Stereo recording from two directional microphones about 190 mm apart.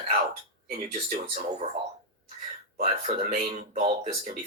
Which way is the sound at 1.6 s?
35° right (ahead or behind).